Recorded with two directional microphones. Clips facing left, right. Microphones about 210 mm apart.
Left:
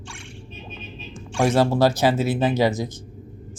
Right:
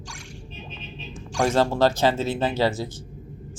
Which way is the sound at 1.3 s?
5° left (ahead or behind).